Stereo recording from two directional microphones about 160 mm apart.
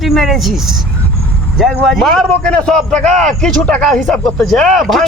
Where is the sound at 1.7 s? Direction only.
Centre (ahead or behind).